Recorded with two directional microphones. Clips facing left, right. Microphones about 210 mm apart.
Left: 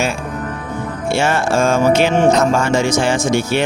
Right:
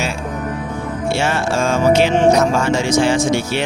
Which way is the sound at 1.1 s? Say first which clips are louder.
Left 3 dB; 50° left (ahead or behind).